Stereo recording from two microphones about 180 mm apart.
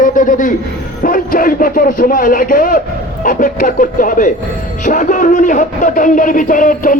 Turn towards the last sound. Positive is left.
turn(degrees=50)  # may be behind; listen again after turning